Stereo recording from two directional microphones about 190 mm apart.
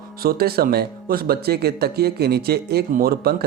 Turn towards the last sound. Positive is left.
turn(degrees=-55)  # may be behind; listen again after turning